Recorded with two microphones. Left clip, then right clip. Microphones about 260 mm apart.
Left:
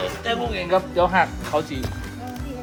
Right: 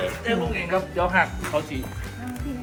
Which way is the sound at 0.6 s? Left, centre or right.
Left.